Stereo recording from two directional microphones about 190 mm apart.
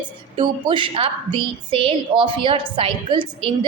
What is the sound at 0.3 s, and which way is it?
A woman's voice, 25° right (ahead or behind).